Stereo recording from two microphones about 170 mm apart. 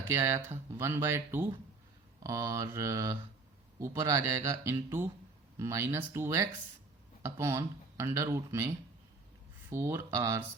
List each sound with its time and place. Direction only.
0.0 s speech: 15° right (ahead or behind)
2.2 s mantra: 20° right (ahead or behind)
3.8 s speech: 15° right (ahead or behind)
9.6 s speech: 15° right (ahead or behind)